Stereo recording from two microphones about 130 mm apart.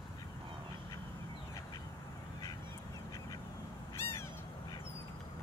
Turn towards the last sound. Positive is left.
turn(degrees=20)  # may be behind; listen again after turning